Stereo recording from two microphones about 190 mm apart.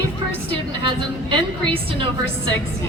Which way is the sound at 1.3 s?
25° right (ahead or behind).